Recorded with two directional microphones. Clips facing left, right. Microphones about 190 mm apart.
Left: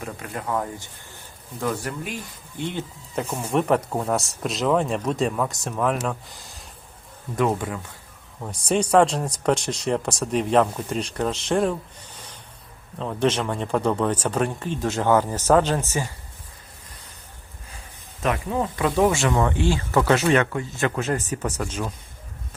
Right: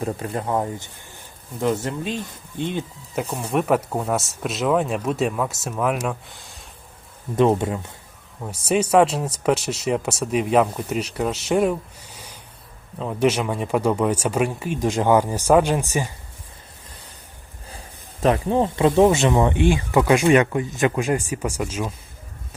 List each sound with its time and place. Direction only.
0.0 s speech: 30° right (ahead or behind); by 3.2 s 15° right (ahead or behind)
3.5 s speech: 5° right (ahead or behind)
7.3 s speech: 25° right (ahead or behind)
8.4 s speech: 5° right (ahead or behind)
17.7 s speech: 35° right (ahead or behind); by 21.9 s 5° right (ahead or behind)